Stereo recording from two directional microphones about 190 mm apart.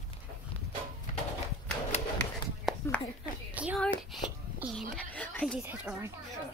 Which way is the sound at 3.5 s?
10° right (ahead or behind).